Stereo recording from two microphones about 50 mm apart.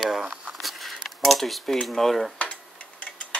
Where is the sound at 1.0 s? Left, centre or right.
Centre.